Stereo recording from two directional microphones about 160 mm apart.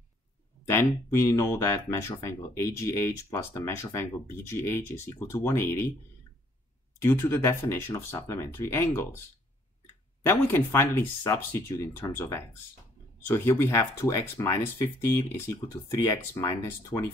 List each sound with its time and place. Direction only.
0.7 s speech: 15° left (ahead or behind)
7.0 s speech: 15° left (ahead or behind)
10.2 s speech: 15° left (ahead or behind)